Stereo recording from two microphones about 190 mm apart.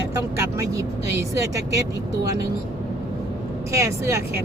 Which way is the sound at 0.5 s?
15° right (ahead or behind).